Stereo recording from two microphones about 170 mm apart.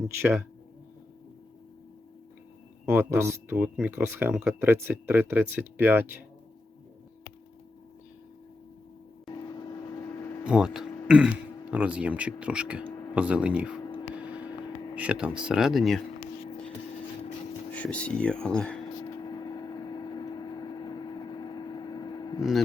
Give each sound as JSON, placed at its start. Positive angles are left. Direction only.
{"t": 0.2, "sound": "speech", "side_deg": -10}
{"t": 2.8, "sound": "speech", "side_deg": -15}
{"t": 9.3, "sound": "a sound", "side_deg": 20}
{"t": 10.4, "sound": "speech", "side_deg": -5}
{"t": 14.0, "sound": "vehicle", "side_deg": -5}
{"t": 14.9, "sound": "speech", "side_deg": -10}
{"t": 17.7, "sound": "speech", "side_deg": 10}
{"t": 19.2, "sound": "vehicle", "side_deg": 25}
{"t": 22.4, "sound": "speech", "side_deg": 0}